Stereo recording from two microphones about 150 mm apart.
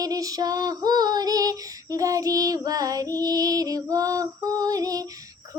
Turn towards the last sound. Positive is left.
turn(degrees=-25)  # may be behind; listen again after turning